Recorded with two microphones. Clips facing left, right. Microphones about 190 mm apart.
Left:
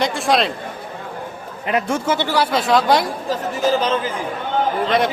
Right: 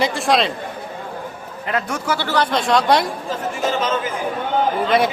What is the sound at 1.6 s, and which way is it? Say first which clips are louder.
Speech: left 3 dB; 20° left (ahead or behind).